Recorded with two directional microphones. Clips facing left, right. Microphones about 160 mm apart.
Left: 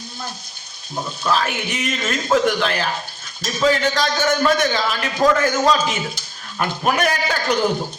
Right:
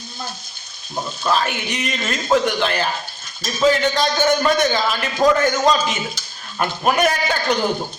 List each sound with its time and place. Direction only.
1.2 s a man's voice: centre (ahead or behind)